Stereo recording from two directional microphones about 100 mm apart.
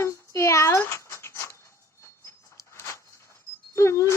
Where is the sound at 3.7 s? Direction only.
30° left (ahead or behind).